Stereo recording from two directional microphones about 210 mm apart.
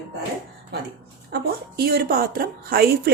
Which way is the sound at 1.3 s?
50° right (ahead or behind).